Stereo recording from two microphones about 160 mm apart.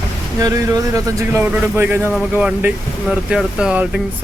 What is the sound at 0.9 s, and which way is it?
Speech, 20° right (ahead or behind).